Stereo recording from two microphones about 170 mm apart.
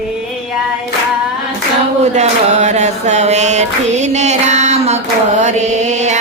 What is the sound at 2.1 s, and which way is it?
Music, 40° right (ahead or behind).